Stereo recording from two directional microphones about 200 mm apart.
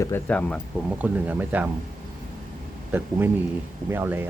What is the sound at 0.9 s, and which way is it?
Speech, 10° right (ahead or behind).